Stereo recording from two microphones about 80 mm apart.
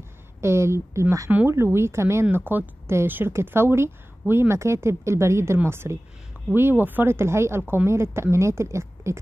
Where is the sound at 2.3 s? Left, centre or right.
Right.